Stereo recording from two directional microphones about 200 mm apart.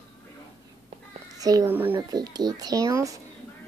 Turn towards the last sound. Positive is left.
turn(degrees=-15)  # may be behind; listen again after turning